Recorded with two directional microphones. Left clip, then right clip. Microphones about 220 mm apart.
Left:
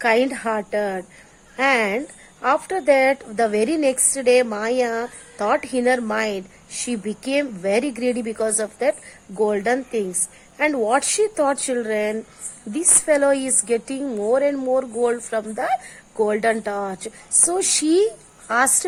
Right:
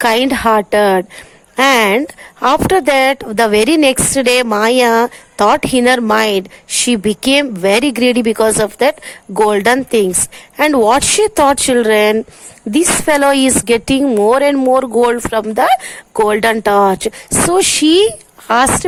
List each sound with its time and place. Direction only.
0.0 s speech: 40° right (ahead or behind)